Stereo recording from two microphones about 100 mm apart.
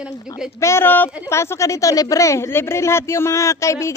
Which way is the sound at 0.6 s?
25° left (ahead or behind).